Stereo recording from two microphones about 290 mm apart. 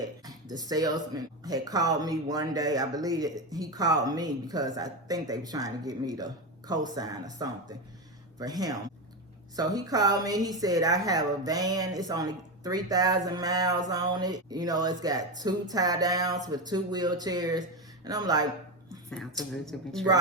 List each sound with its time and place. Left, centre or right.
0.3 s speech: centre
19.6 s speech: centre